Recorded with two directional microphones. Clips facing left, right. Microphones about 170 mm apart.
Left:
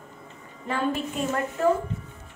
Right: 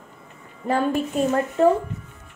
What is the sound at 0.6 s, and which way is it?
Speech, 40° right (ahead or behind).